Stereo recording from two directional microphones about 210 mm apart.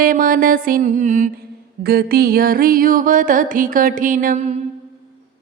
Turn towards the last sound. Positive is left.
turn(degrees=-35)  # may be behind; listen again after turning